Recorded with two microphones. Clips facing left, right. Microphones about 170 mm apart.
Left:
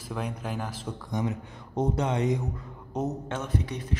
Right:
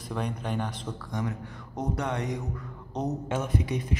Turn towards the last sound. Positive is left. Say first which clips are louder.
# right 3 dB
turn(degrees=-15)  # may be behind; listen again after turning